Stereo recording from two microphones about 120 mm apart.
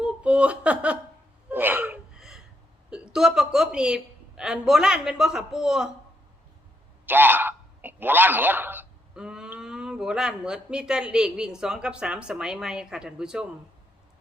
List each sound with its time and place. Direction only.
0.0 s a sound: 10° right (ahead or behind)
1.5 s gasp: 15° right (ahead or behind)
2.9 s a woman's voice: 5° right (ahead or behind)
7.0 s a man's voice: 15° right (ahead or behind)
9.1 s speech: 5° right (ahead or behind)